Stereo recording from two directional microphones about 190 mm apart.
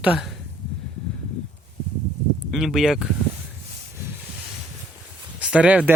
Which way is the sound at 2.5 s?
Centre (ahead or behind).